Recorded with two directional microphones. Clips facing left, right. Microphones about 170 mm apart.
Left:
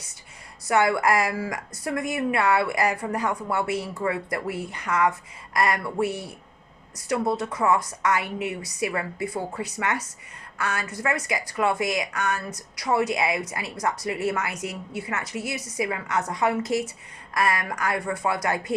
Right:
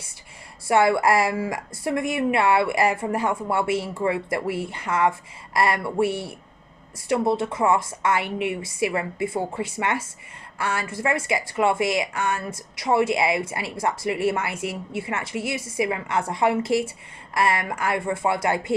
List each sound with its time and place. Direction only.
0.7 s a woman's voice: 30° right (ahead or behind)